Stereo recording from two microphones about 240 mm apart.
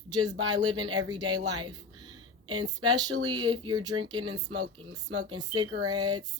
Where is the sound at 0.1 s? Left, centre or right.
Centre.